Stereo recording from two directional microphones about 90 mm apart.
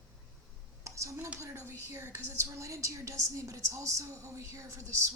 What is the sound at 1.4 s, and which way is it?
Speech, 35° right (ahead or behind).